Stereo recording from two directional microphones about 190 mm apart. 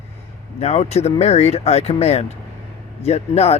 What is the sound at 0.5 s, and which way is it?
Speech, 35° left (ahead or behind).